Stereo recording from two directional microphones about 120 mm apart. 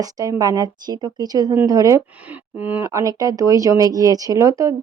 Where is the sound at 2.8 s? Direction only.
25° right (ahead or behind).